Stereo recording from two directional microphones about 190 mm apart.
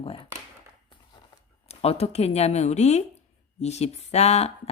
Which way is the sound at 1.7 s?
35° left (ahead or behind).